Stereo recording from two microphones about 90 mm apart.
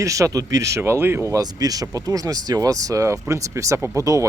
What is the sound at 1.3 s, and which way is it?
Speech, 45° right (ahead or behind).